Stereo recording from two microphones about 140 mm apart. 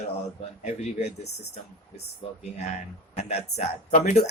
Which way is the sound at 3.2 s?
50° left (ahead or behind).